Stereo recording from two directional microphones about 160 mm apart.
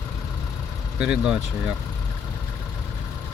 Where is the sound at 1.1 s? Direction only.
5° right (ahead or behind).